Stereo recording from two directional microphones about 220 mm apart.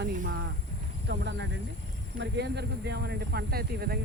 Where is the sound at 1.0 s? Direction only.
50° right (ahead or behind).